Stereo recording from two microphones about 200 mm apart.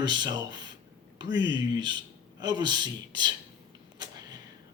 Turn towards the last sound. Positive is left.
turn(degrees=-20)  # may be behind; listen again after turning